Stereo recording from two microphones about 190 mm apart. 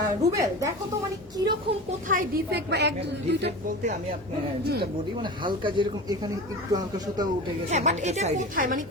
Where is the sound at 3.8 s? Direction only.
35° right (ahead or behind).